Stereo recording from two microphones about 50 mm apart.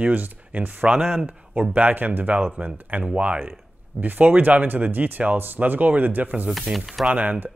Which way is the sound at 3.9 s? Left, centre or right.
Right.